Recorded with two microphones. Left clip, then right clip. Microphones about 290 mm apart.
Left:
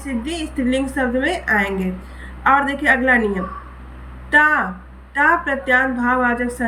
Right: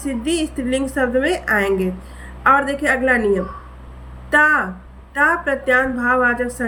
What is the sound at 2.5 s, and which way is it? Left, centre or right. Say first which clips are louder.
Speech: even; right.